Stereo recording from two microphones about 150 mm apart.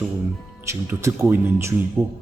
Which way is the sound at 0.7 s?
15° right (ahead or behind).